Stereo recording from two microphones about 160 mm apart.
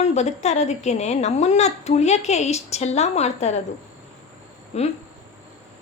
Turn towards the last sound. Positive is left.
turn(degrees=40)  # may be behind; listen again after turning